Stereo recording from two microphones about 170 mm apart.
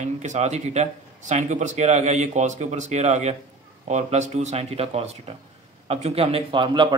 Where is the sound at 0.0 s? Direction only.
45° right (ahead or behind).